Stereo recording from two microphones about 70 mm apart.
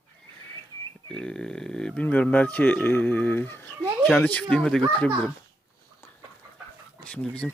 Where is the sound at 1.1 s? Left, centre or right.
Centre; by 3.9 s left.